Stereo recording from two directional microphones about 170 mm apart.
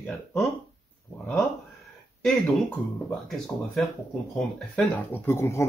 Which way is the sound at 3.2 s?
5° left (ahead or behind).